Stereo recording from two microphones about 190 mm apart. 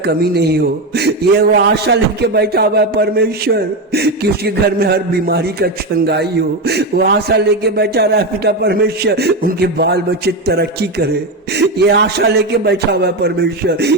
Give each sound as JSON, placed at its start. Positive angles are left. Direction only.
{"t": 0.0, "sound": "a man's voice", "side_deg": -55}